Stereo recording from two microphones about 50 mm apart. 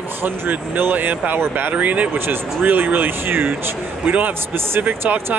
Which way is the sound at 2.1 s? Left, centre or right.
Right.